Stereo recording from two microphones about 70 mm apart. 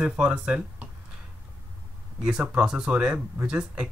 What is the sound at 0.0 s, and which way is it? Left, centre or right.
Speech, centre.